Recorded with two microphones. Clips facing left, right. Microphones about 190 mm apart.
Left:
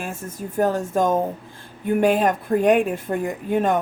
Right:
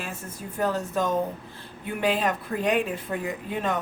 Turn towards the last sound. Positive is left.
turn(degrees=50)  # may be behind; listen again after turning